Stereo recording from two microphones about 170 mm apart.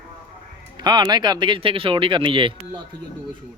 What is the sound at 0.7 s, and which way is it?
Speech, 25° right (ahead or behind).